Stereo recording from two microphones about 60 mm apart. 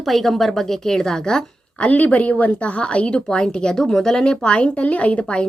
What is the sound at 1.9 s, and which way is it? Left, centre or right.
A woman's voice, left.